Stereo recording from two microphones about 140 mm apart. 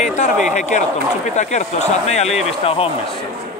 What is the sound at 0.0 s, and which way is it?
Speech, 55° left (ahead or behind).